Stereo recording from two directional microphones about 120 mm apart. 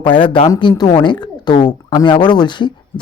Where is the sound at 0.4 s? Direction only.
35° left (ahead or behind).